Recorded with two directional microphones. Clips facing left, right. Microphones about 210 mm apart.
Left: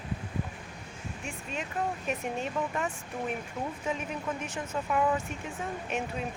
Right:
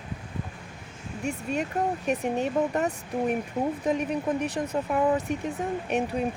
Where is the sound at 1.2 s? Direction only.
40° right (ahead or behind).